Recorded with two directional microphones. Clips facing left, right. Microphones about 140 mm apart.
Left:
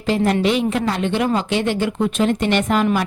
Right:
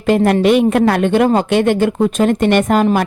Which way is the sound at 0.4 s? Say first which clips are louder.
Right 7 dB; 55° right (ahead or behind).